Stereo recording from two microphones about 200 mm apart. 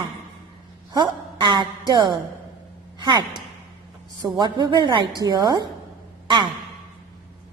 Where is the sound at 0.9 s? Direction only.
20° right (ahead or behind).